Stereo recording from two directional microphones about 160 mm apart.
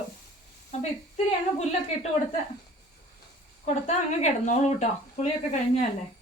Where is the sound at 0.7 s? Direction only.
45° left (ahead or behind).